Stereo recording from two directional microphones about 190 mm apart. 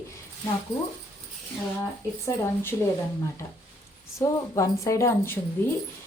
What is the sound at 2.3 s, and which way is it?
Speech, 10° left (ahead or behind).